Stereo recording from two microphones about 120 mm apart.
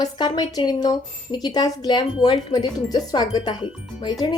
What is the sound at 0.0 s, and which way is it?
Speech, 35° left (ahead or behind).